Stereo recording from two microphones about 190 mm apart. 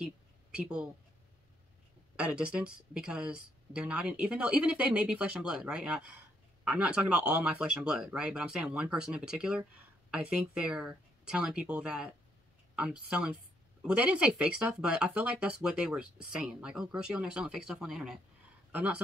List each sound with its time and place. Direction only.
0.6 s speech: 5° right (ahead or behind)
2.1 s speech: 5° right (ahead or behind)